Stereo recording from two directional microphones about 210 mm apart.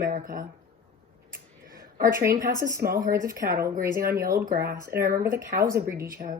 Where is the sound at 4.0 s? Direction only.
45° right (ahead or behind).